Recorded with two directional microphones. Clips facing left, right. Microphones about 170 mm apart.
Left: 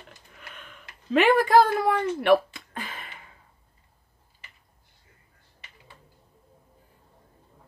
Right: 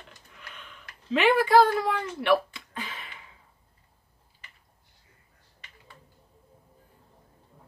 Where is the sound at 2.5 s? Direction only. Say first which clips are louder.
Left 1 dB; 50° left (ahead or behind).